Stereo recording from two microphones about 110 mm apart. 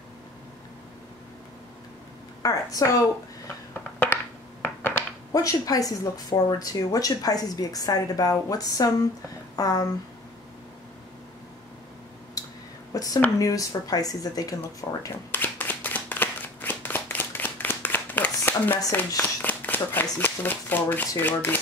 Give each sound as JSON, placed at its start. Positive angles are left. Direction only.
{"t": 2.4, "sound": "speech", "side_deg": 30}
{"t": 4.0, "sound": "a sound", "side_deg": 20}
{"t": 5.3, "sound": "speech", "side_deg": 30}
{"t": 12.4, "sound": "a sound", "side_deg": 35}
{"t": 12.9, "sound": "speech", "side_deg": 30}
{"t": 15.3, "sound": "shuffling cards", "side_deg": 15}
{"t": 19.4, "sound": "speech", "side_deg": 15}